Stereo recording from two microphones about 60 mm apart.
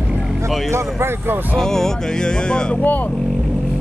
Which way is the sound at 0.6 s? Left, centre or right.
Right.